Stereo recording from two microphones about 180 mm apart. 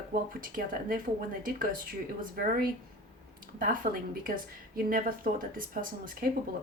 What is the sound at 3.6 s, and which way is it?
Speech, 50° right (ahead or behind).